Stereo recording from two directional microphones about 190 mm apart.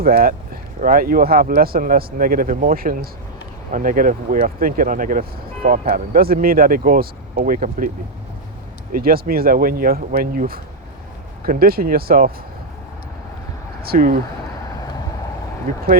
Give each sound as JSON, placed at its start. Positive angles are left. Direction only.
{"t": 0.0, "sound": "speech", "side_deg": -50}
{"t": 8.9, "sound": "speech", "side_deg": -50}
{"t": 13.8, "sound": "speech", "side_deg": -55}
{"t": 15.7, "sound": "speech", "side_deg": -45}